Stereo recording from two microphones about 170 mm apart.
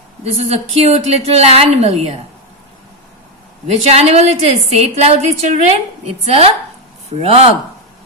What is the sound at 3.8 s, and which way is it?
A woman's voice, 40° right (ahead or behind).